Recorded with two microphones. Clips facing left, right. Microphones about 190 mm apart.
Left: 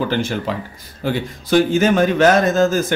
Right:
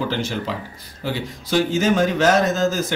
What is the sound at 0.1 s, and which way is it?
A man's voice, 55° left (ahead or behind).